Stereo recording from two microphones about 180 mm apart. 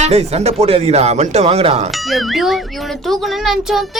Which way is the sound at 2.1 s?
Centre (ahead or behind).